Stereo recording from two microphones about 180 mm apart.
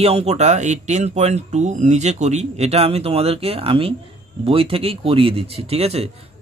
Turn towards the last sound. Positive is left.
turn(degrees=-35)  # may be behind; listen again after turning